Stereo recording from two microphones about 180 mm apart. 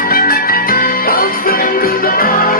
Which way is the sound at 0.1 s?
55° left (ahead or behind).